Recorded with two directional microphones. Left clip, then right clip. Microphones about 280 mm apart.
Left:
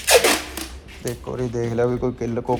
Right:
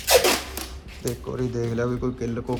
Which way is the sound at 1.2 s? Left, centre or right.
Centre.